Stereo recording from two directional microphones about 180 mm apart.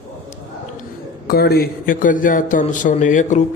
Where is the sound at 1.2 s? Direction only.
60° left (ahead or behind).